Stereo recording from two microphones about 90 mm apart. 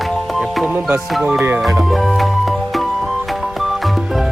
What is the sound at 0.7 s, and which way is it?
Music, 20° right (ahead or behind).